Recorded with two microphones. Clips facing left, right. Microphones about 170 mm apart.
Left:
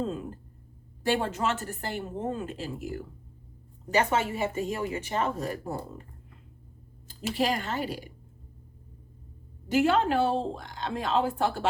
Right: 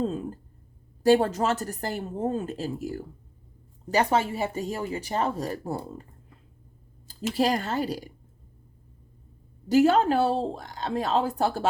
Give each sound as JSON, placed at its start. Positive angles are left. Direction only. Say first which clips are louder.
{"t": 1.0, "sound": "speech", "louder": "right 7 dB", "side_deg": -40}
{"t": 7.3, "sound": "speech", "louder": "right 4 dB", "side_deg": -40}
{"t": 9.6, "sound": "speech", "louder": "right 4 dB", "side_deg": -40}